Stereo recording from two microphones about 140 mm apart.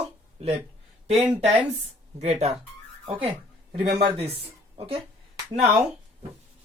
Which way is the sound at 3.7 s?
45° right (ahead or behind).